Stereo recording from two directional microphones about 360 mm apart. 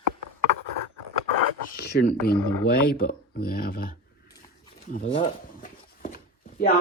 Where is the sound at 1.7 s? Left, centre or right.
Left.